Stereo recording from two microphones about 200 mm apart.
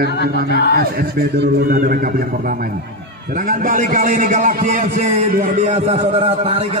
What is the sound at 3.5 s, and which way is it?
A man's voice, 40° right (ahead or behind).